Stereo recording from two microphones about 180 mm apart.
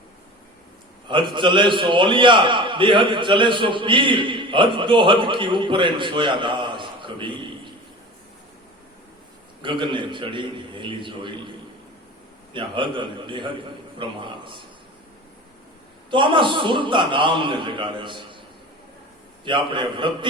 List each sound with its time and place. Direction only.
1.0 s a man's voice: 25° right (ahead or behind)
9.6 s a man's voice: 25° right (ahead or behind)
12.5 s a man's voice: 25° right (ahead or behind)
16.0 s a man's voice: 25° right (ahead or behind)
19.5 s a man's voice: 25° right (ahead or behind)